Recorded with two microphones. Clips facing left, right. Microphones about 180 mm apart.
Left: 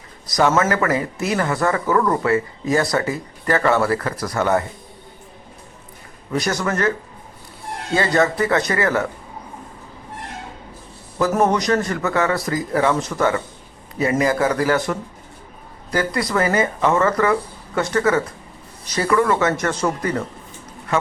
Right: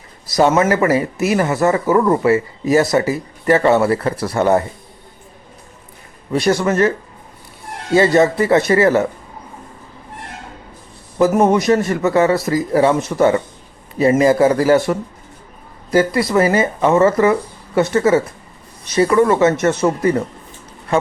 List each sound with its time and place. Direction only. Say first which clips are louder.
0.3 s speech: right 4 dB; 25° right (ahead or behind)
6.3 s speech: right 6 dB; 25° right (ahead or behind)
7.9 s speech: right 6 dB; 25° right (ahead or behind)
11.2 s speech: right 5 dB; 20° right (ahead or behind)